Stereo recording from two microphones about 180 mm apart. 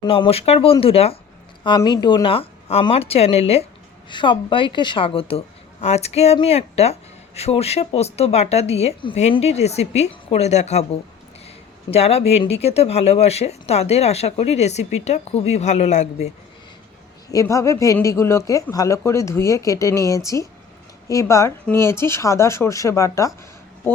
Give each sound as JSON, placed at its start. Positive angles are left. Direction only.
{"t": 0.0, "sound": "a woman's voice", "side_deg": 30}
{"t": 17.3, "sound": "speech", "side_deg": 15}